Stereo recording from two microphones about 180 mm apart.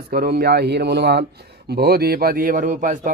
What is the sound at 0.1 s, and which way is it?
A man's voice, 60° right (ahead or behind).